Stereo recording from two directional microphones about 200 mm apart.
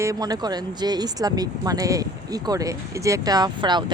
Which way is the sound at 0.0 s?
15° right (ahead or behind).